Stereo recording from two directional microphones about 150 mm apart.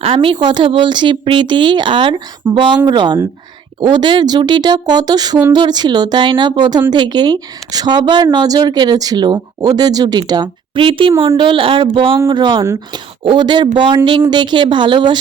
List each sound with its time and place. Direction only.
0.0 s a woman's voice: 35° right (ahead or behind)